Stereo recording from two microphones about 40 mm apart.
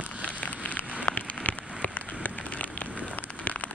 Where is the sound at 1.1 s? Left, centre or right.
Left.